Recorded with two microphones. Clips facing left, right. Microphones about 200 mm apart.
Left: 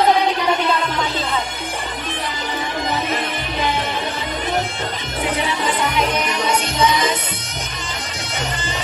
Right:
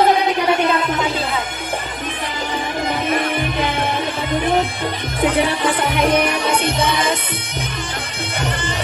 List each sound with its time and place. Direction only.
5.2 s music: 55° right (ahead or behind)